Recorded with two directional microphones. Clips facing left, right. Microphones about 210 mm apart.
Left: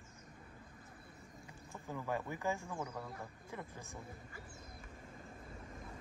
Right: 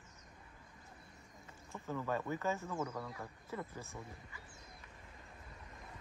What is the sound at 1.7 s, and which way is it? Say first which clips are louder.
Speech: right 2 dB; 15° left (ahead or behind).